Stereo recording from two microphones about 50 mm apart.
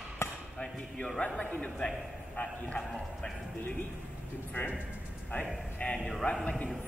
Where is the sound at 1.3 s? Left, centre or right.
Left.